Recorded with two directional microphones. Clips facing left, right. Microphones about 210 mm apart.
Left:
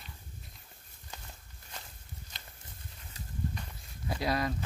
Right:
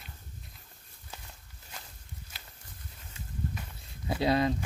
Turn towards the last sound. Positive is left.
turn(degrees=-25)  # may be behind; listen again after turning